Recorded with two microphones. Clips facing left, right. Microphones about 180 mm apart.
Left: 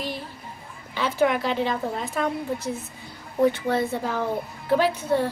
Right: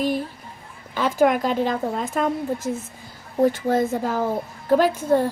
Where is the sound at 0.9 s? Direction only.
45° right (ahead or behind).